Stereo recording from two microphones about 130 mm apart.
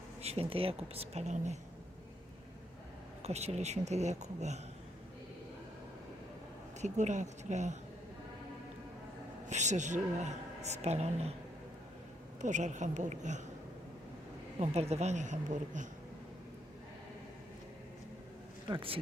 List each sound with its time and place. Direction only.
0.2 s speech: 50° right (ahead or behind)
3.2 s a woman's voice: 55° right (ahead or behind)
6.8 s a woman's voice: 65° right (ahead or behind)
9.5 s a woman's voice: 65° right (ahead or behind)
12.4 s speech: 70° right (ahead or behind)
14.6 s a woman's voice: 55° right (ahead or behind); by 15.9 s 70° right (ahead or behind)
18.7 s speech: 45° right (ahead or behind)